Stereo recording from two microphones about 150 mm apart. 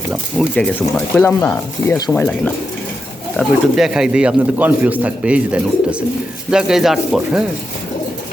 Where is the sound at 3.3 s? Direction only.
5° right (ahead or behind).